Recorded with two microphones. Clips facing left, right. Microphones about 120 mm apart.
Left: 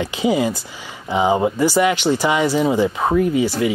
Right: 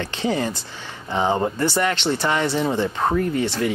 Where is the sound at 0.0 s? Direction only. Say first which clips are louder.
Left 5 dB; 10° left (ahead or behind).